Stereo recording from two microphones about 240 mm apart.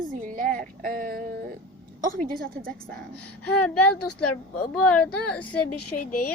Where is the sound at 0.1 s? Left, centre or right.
Right.